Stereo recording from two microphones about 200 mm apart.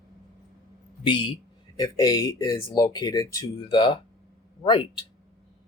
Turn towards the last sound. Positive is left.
turn(degrees=25)  # may be behind; listen again after turning